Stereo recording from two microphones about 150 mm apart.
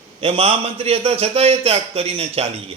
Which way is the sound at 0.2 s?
40° right (ahead or behind).